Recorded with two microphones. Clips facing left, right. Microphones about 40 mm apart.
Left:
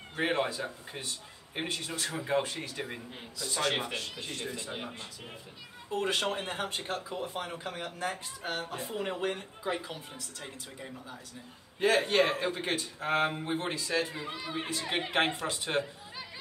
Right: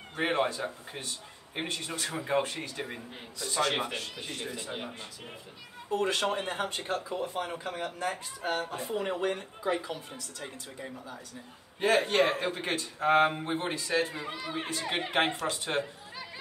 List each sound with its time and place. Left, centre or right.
0.1 s a man's voice: centre
11.8 s a man's voice: centre